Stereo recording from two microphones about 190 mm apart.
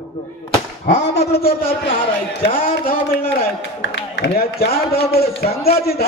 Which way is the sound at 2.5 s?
50° left (ahead or behind).